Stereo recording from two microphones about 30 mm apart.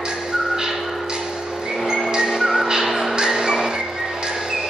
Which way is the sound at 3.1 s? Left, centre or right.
Centre.